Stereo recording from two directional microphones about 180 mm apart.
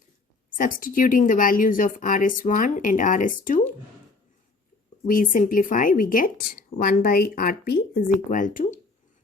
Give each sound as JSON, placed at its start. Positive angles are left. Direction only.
{"t": 0.5, "sound": "speech", "side_deg": 50}
{"t": 5.0, "sound": "speech", "side_deg": 50}